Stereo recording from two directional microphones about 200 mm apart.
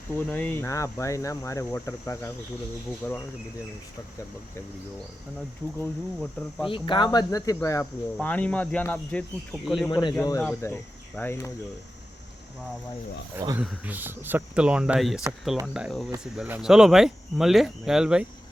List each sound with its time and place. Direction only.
0.3 s speech: 10° left (ahead or behind)
5.8 s speech: centre (ahead or behind)
6.7 s speech: 25° left (ahead or behind); by 9.9 s centre (ahead or behind)
9.9 s speech: 25° left (ahead or behind)
13.6 s speech: 5° right (ahead or behind)